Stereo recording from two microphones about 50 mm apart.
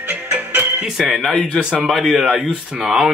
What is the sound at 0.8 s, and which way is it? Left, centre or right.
Speech, centre.